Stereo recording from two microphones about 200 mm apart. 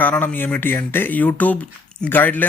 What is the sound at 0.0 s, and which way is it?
A man's voice, 10° left (ahead or behind).